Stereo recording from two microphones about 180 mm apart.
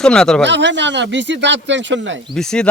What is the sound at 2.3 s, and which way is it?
Speech, 5° left (ahead or behind).